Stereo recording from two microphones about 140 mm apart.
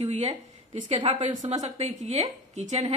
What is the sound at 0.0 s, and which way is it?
Speech, 50° right (ahead or behind).